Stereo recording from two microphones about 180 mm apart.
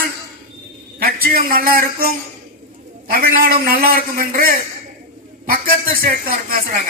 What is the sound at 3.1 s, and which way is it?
A man's voice, 55° right (ahead or behind).